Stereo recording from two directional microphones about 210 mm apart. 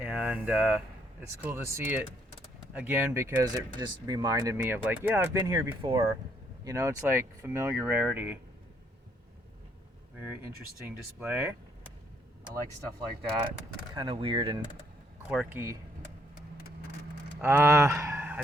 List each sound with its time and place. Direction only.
0.0 s a sound: 5° right (ahead or behind)
1.4 s speech: 10° right (ahead or behind)
5.8 s speech: 25° right (ahead or behind)
6.7 s speech: 15° right (ahead or behind)
10.2 s speech: 10° right (ahead or behind)
13.9 s speech: 20° right (ahead or behind)
15.3 s speech: 5° right (ahead or behind)
17.4 s speech: 10° right (ahead or behind)